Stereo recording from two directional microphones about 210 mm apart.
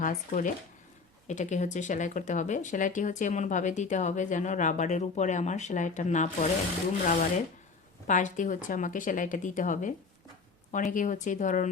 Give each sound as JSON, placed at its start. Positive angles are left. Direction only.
{"t": 0.0, "sound": "speech", "side_deg": 40}
{"t": 8.0, "sound": "speech", "side_deg": 35}